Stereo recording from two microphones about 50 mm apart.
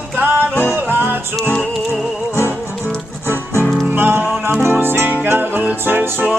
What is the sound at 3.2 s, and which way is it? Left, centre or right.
Music, right.